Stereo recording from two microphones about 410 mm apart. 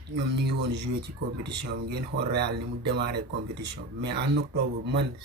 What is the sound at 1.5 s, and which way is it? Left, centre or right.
Speech, right.